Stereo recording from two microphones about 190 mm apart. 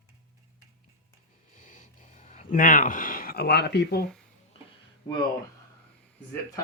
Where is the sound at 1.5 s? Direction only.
45° left (ahead or behind); by 4.1 s 60° left (ahead or behind).